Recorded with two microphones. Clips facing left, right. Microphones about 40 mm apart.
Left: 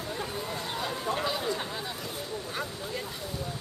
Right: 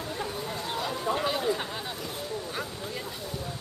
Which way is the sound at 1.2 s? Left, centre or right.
Centre.